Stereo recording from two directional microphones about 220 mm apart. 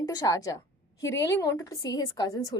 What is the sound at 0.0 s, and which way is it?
A woman's voice, 15° left (ahead or behind).